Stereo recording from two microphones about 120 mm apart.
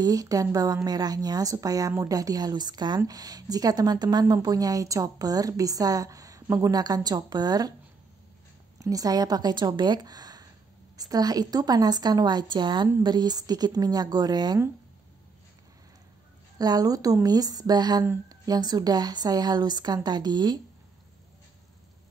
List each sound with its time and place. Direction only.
0.0 s a woman's voice: 30° right (ahead or behind)
8.7 s a woman's voice: 30° right (ahead or behind)
16.5 s a woman's voice: 30° right (ahead or behind)